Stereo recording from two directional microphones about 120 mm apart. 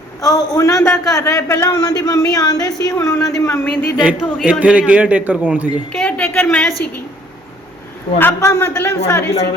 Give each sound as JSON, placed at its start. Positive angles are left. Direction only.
{"t": 0.2, "sound": "a man's voice", "side_deg": 30}
{"t": 4.0, "sound": "a man's voice", "side_deg": -5}
{"t": 5.9, "sound": "a man's voice", "side_deg": 5}
{"t": 8.2, "sound": "a man's voice", "side_deg": 20}